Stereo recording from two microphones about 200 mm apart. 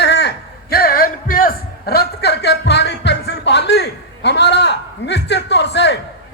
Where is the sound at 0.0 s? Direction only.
55° left (ahead or behind).